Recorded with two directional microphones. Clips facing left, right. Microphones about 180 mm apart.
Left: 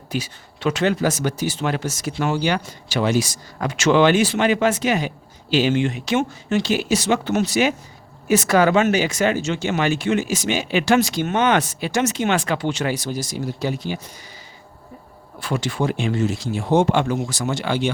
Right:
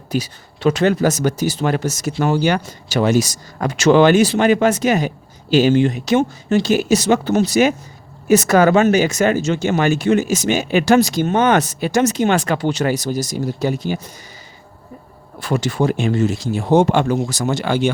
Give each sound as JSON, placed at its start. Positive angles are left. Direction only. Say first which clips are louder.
{"t": 0.1, "sound": "speech", "louder": "right 5 dB", "side_deg": -40}
{"t": 15.4, "sound": "speech", "louder": "right 4 dB", "side_deg": -40}